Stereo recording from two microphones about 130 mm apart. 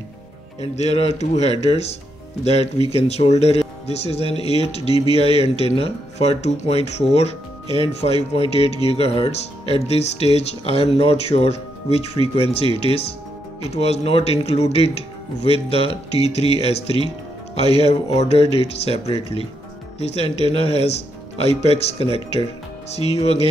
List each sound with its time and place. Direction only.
0.6 s speech: 50° left (ahead or behind)